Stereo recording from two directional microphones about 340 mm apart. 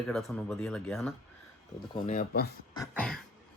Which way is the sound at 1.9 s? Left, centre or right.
Left.